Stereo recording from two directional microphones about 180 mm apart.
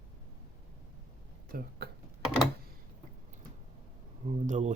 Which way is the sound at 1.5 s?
55° right (ahead or behind).